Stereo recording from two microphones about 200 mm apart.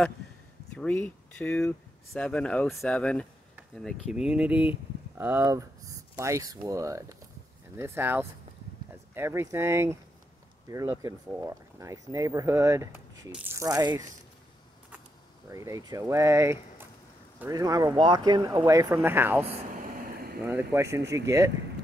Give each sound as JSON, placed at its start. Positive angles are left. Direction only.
{"t": 0.7, "sound": "speech", "side_deg": 10}
{"t": 15.4, "sound": "speech", "side_deg": -15}
{"t": 20.4, "sound": "speech", "side_deg": -15}